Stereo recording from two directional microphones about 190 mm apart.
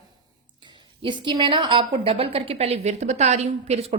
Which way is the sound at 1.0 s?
25° right (ahead or behind).